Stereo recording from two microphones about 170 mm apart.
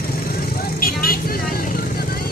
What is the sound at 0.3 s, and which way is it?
Vehicle, 60° left (ahead or behind).